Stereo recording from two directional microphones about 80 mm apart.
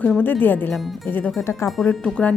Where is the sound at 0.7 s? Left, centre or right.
Centre.